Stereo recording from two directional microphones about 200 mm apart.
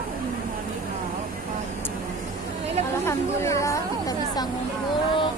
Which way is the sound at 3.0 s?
15° left (ahead or behind).